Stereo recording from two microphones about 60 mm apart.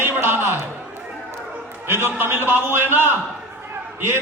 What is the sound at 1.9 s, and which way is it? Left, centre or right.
Speech, right.